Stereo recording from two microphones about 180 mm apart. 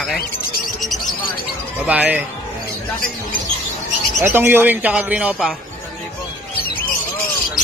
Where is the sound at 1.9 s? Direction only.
10° right (ahead or behind).